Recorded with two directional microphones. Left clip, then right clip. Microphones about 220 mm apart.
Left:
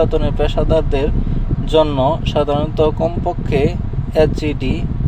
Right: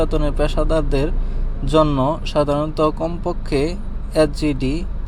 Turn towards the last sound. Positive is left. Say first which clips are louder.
# left 2 dB
turn(degrees=-25)  # may be behind; listen again after turning